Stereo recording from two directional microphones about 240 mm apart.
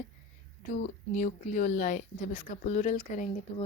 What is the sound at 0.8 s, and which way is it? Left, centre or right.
A woman's voice, left.